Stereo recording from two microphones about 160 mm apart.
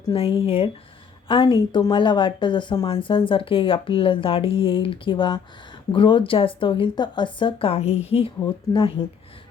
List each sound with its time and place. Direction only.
0.0 s speech: 35° left (ahead or behind)